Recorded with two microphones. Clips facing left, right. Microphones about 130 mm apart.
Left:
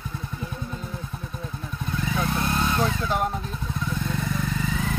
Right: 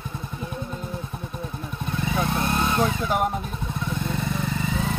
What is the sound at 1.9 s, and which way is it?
Vehicle, 25° right (ahead or behind).